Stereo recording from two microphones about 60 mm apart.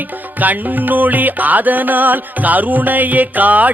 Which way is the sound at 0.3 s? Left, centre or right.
Right.